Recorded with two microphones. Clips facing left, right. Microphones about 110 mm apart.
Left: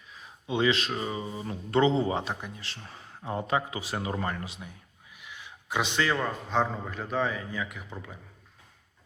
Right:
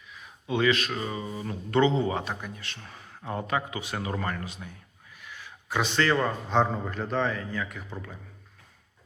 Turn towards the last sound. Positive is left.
turn(degrees=15)  # may be behind; listen again after turning